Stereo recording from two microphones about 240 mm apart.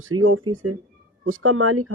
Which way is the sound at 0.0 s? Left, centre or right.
Right.